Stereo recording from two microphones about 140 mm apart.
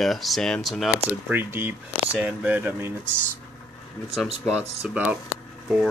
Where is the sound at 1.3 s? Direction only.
15° right (ahead or behind).